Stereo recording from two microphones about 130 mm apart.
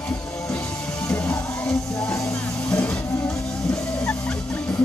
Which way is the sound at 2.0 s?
25° left (ahead or behind).